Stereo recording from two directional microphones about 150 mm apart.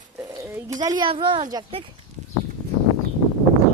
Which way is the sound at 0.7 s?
25° right (ahead or behind).